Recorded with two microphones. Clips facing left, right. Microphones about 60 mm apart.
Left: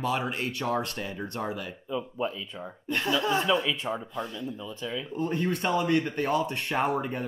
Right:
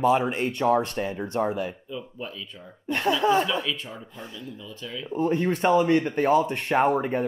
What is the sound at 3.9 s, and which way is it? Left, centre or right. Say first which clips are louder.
Speech: left 8 dB; left.